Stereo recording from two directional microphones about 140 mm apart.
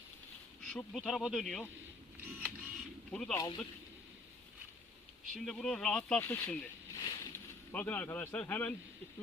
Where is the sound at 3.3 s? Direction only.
30° left (ahead or behind).